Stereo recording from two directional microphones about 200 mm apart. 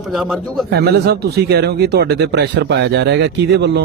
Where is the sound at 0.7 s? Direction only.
55° right (ahead or behind).